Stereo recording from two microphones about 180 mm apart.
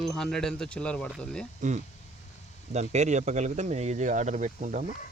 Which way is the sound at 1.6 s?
40° right (ahead or behind).